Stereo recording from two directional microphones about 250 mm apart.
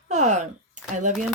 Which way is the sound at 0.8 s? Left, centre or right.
Right.